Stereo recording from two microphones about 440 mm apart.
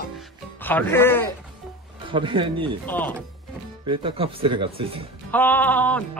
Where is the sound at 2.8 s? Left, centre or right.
Centre.